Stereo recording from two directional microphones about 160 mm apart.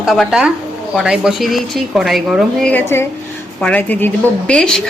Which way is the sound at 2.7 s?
15° left (ahead or behind).